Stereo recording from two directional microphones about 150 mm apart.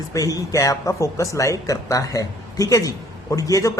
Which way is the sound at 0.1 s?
25° left (ahead or behind).